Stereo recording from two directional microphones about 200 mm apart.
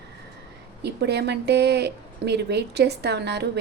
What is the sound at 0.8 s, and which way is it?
Speech, 55° right (ahead or behind).